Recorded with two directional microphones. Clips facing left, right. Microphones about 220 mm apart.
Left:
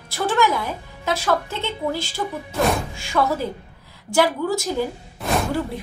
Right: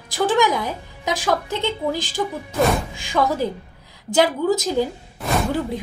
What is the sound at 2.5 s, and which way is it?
Music, centre (ahead or behind).